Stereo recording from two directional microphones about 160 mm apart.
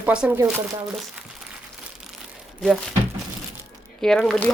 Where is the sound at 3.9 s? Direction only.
5° left (ahead or behind).